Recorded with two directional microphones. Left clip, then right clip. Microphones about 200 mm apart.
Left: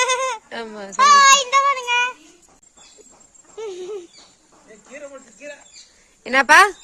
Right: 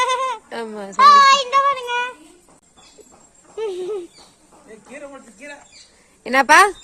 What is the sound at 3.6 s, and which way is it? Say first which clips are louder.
Speech: right 5 dB; 25° right (ahead or behind).